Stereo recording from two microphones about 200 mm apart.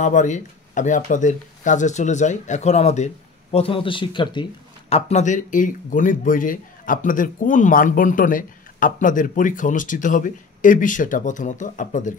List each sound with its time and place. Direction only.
0.0 s speech: 40° left (ahead or behind)